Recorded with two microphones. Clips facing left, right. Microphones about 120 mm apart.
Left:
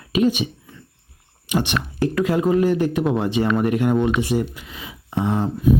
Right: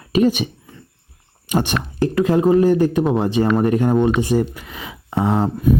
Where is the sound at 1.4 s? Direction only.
45° right (ahead or behind).